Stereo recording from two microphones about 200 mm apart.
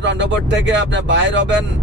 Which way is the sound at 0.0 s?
60° right (ahead or behind).